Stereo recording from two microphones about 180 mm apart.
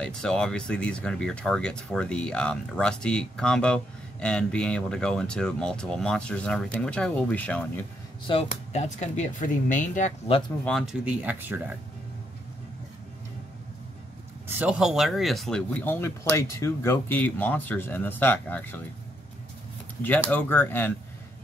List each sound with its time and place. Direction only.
0.0 s speech: 5° left (ahead or behind)
8.3 s speech: 35° left (ahead or behind)
10.6 s speech: 5° left (ahead or behind)
11.1 s speech: 10° right (ahead or behind)
14.6 s speech: 5° right (ahead or behind); by 18.8 s 10° left (ahead or behind)
20.0 s speech: 10° left (ahead or behind)